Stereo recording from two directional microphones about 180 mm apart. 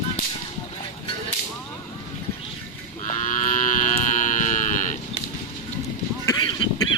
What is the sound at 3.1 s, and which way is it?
Livestock, 45° left (ahead or behind).